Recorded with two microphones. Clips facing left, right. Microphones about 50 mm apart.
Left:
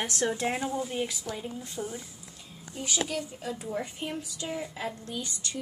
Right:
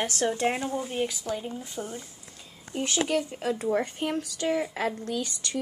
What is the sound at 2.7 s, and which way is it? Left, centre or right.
A woman's voice, right.